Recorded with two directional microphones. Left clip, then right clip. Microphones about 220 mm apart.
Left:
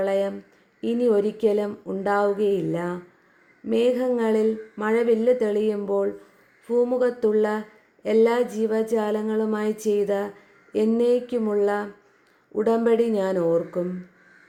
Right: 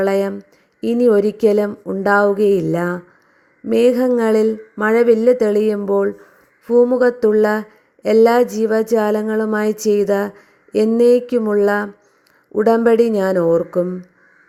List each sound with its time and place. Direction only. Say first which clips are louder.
0.0 s a woman's voice: right 6 dB; 30° right (ahead or behind)